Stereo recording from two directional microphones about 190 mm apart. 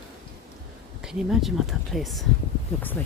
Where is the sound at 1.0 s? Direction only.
Centre (ahead or behind).